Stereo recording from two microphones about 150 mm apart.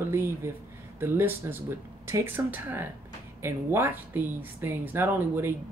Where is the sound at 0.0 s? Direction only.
15° right (ahead or behind).